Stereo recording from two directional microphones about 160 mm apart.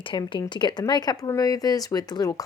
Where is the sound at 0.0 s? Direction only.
30° left (ahead or behind).